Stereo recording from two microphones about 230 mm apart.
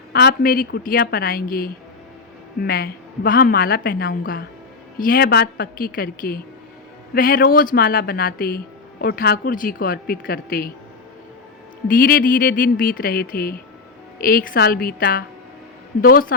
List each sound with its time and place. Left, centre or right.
0.1 s speech: left
11.9 s speech: left